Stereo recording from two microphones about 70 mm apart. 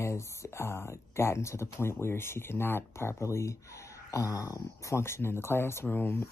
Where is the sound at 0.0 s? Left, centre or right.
Left.